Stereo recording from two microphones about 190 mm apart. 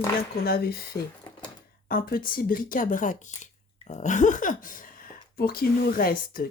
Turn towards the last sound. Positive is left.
turn(degrees=50)  # may be behind; listen again after turning